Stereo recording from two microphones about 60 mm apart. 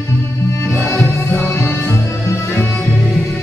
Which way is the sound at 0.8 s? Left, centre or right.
Left.